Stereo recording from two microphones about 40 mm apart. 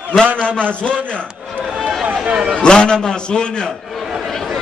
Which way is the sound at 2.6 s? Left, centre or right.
Left.